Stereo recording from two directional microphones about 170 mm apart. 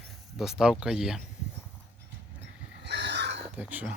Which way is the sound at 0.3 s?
5° right (ahead or behind).